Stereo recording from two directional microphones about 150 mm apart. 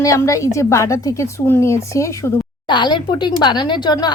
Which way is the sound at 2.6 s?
30° left (ahead or behind).